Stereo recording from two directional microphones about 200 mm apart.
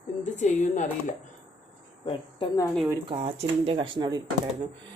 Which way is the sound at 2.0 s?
25° left (ahead or behind).